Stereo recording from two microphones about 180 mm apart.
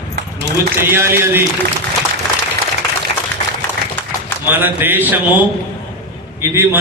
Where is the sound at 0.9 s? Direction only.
15° right (ahead or behind).